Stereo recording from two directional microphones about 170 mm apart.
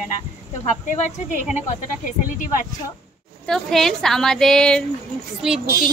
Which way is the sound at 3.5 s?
Centre (ahead or behind).